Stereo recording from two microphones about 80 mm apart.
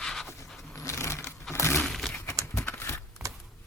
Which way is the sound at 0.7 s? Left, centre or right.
Left.